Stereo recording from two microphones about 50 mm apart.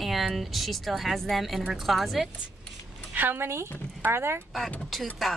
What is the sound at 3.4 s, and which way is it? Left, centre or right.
Speech, right.